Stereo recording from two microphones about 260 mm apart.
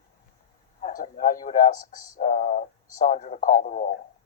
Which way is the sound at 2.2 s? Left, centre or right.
Left.